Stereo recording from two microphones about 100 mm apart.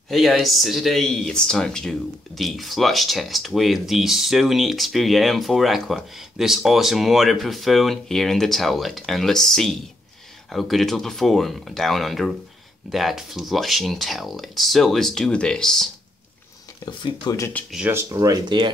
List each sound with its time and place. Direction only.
0.1 s speech: centre (ahead or behind)
16.8 s speech: 45° left (ahead or behind)
17.8 s speech: 30° right (ahead or behind)